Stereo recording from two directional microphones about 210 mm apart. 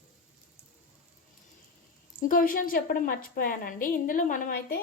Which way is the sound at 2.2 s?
40° left (ahead or behind).